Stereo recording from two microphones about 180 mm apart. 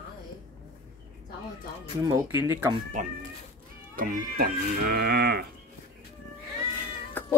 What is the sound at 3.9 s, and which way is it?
Speech, 50° right (ahead or behind).